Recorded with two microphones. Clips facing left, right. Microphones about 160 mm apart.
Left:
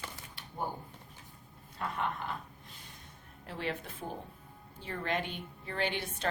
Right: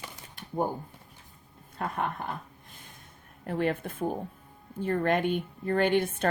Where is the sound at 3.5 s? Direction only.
50° right (ahead or behind).